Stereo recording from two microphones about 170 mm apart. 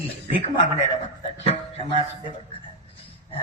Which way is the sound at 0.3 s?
30° left (ahead or behind).